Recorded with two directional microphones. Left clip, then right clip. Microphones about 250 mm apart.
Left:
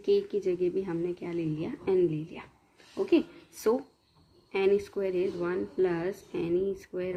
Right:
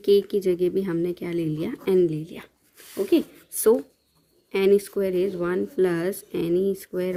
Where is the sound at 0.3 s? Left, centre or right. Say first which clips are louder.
Right 6 dB; right.